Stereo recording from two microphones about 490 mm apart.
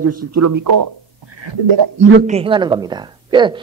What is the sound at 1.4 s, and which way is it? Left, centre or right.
Speech, right.